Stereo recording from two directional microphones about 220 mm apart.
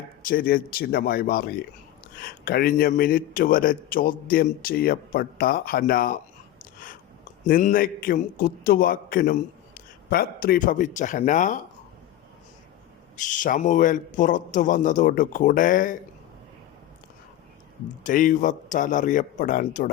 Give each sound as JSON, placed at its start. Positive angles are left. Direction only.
{"t": 0.3, "sound": "a man's voice", "side_deg": 40}
{"t": 7.4, "sound": "a man's voice", "side_deg": 40}
{"t": 13.1, "sound": "a man's voice", "side_deg": 35}
{"t": 18.0, "sound": "a man's voice", "side_deg": 35}